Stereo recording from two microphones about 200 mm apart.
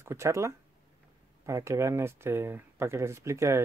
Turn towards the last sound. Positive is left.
turn(degrees=-15)  # may be behind; listen again after turning